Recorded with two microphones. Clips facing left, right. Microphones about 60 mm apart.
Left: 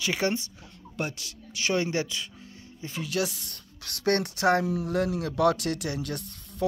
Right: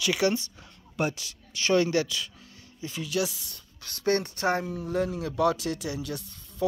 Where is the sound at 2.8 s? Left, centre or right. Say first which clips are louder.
Even; left.